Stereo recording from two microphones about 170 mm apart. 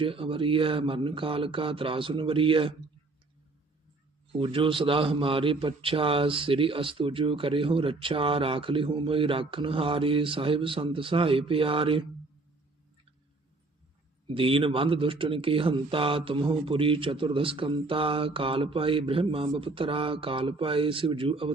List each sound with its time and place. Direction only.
0.0 s a man's voice: 30° right (ahead or behind)
4.3 s a man's voice: 30° right (ahead or behind)
14.3 s a man's voice: 30° right (ahead or behind)